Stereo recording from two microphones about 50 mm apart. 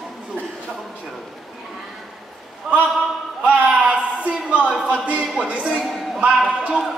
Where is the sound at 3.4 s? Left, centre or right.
Right.